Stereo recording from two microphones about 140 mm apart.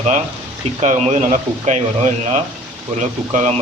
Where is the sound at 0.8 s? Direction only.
55° right (ahead or behind).